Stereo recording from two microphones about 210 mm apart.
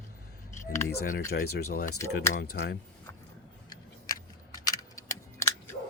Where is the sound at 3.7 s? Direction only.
15° left (ahead or behind).